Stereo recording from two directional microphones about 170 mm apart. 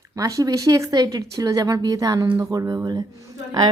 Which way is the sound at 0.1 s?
20° right (ahead or behind).